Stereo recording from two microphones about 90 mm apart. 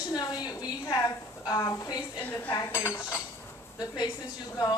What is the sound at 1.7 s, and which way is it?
Speech, 35° left (ahead or behind).